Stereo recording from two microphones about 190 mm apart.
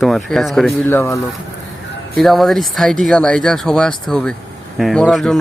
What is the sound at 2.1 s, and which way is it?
Speech, centre (ahead or behind).